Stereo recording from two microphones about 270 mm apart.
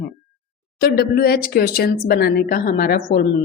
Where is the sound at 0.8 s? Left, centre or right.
Left.